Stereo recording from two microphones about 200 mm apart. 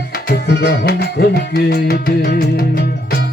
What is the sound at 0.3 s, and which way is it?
Music, 55° left (ahead or behind).